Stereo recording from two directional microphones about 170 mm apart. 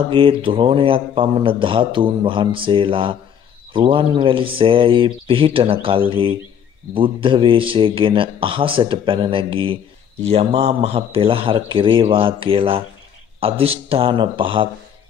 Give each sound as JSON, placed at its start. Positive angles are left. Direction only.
{"t": 0.1, "sound": "a man's voice", "side_deg": -30}